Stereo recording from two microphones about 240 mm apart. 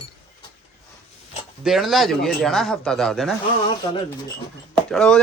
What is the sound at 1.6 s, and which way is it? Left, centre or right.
Speech, centre.